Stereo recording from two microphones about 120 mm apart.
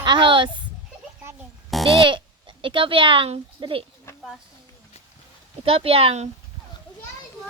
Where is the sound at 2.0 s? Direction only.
45° right (ahead or behind).